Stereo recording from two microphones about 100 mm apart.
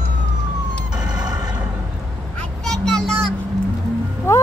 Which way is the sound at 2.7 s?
5° left (ahead or behind).